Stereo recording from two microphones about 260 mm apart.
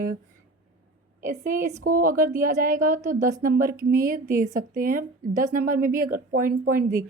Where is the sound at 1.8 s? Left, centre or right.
Right.